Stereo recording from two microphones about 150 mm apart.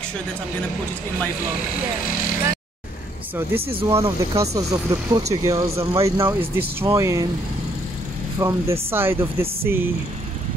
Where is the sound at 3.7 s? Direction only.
15° right (ahead or behind).